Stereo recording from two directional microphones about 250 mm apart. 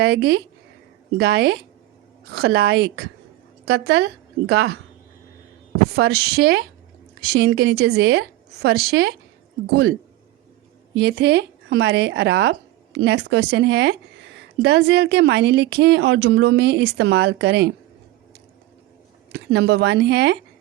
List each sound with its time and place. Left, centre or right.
0.0 s a woman's voice: right
6.0 s a woman's voice: right
10.9 s speech: right
19.3 s speech: right